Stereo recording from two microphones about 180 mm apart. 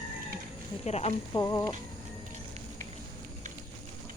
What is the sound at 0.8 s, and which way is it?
Speech, 35° left (ahead or behind).